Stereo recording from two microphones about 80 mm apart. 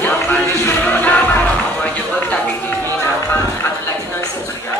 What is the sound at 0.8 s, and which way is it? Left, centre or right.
Music, left.